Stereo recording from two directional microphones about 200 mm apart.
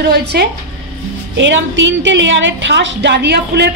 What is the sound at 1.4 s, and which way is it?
A woman's voice, 65° right (ahead or behind).